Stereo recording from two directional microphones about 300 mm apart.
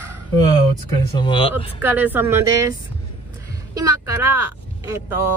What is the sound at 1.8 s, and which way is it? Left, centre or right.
Speech, centre.